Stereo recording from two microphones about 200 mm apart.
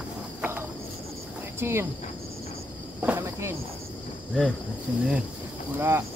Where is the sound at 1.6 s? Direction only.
10° right (ahead or behind).